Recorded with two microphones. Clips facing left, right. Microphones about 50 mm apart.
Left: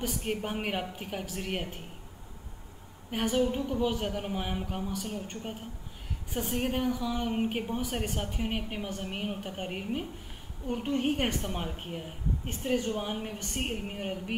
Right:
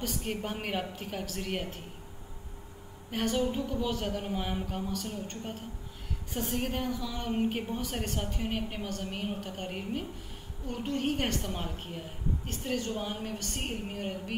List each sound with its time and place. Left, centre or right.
0.0 s a woman's voice: centre
3.1 s a woman's voice: centre